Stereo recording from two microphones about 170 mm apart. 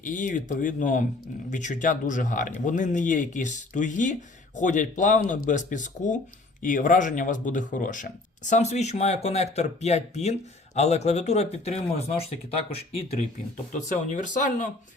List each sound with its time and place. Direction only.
0.0 s speech: 50° left (ahead or behind)
13.7 s speech: 45° left (ahead or behind)